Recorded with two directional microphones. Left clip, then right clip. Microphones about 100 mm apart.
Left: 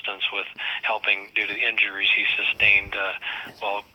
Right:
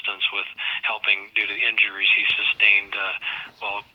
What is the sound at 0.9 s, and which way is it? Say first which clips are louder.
Speech: even; 40° left (ahead or behind).